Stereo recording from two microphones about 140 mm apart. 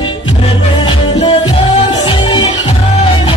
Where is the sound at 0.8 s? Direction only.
35° left (ahead or behind).